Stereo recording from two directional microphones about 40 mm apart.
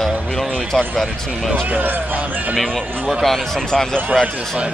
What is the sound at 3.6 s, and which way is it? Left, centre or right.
Speech, centre.